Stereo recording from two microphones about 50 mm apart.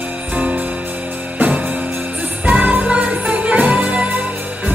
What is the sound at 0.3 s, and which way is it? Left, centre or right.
Music, right.